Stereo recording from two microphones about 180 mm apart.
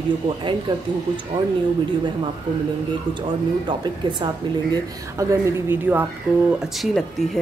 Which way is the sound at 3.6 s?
25° right (ahead or behind).